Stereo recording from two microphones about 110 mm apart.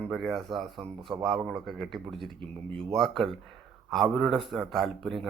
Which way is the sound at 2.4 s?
55° right (ahead or behind).